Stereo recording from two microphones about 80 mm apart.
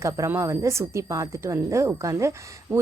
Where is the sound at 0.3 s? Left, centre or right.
Right.